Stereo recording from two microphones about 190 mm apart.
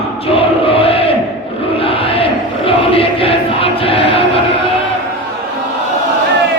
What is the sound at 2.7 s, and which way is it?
Choir, 30° left (ahead or behind).